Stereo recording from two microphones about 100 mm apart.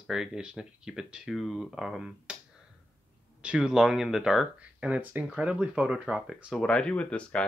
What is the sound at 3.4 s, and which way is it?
Speech, 10° right (ahead or behind).